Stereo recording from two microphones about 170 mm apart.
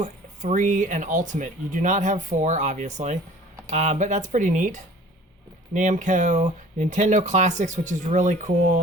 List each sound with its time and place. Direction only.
0.0 s speech: 45° right (ahead or behind)